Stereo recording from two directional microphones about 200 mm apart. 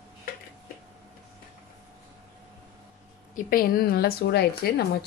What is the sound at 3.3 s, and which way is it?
Speech, 45° left (ahead or behind).